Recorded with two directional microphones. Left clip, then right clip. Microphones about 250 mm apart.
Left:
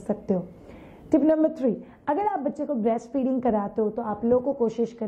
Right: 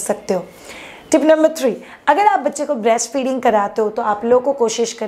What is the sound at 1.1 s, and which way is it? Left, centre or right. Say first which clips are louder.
A woman's voice: right 9 dB; centre.